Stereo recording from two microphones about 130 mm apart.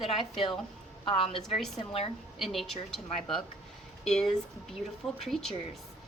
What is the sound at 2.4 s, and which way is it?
A woman's voice, centre (ahead or behind).